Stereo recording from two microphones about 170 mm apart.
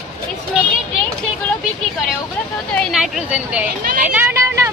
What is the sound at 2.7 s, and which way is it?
Speech, centre (ahead or behind).